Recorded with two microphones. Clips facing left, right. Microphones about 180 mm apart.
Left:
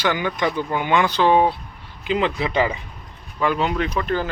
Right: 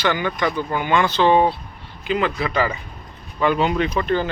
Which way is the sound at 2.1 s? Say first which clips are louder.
Even; 20° left (ahead or behind).